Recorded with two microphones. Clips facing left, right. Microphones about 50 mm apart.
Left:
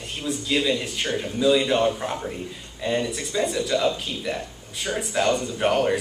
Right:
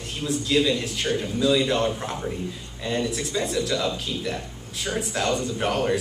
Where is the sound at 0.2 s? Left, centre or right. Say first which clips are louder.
Right 2 dB; centre.